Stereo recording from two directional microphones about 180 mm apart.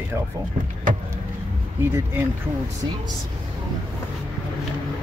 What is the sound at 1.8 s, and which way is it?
Speech, 10° right (ahead or behind).